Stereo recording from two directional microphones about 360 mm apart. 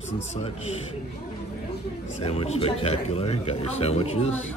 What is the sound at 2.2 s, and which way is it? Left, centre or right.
Speech, centre.